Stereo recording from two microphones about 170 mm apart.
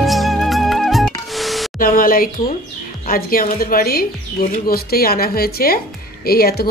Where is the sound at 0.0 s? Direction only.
Centre (ahead or behind).